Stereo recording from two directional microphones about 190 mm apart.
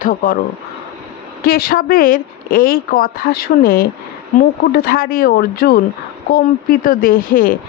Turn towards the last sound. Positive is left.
turn(degrees=50)  # may be behind; listen again after turning